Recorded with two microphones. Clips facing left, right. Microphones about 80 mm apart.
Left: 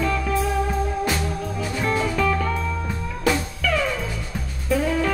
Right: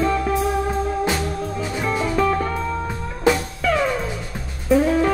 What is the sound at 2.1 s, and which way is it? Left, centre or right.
Music, right.